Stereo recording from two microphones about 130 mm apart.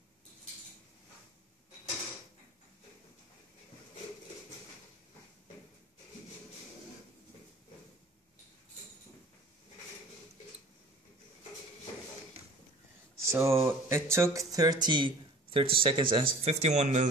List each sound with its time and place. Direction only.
12.4 s a sound: 50° right (ahead or behind)
13.3 s speech: 20° right (ahead or behind); by 16.3 s 40° right (ahead or behind)
16.4 s speech: 60° right (ahead or behind)